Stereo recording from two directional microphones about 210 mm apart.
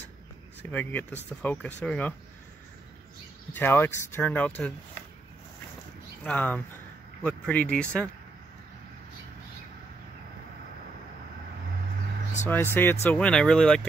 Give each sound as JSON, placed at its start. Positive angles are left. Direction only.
{"t": 0.6, "sound": "speech", "side_deg": 10}
{"t": 3.5, "sound": "speech", "side_deg": 10}
{"t": 6.2, "sound": "speech", "side_deg": 5}
{"t": 12.4, "sound": "speech", "side_deg": 10}